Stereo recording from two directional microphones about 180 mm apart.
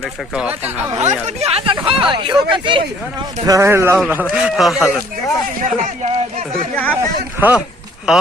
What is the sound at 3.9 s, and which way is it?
Speech, 5° right (ahead or behind).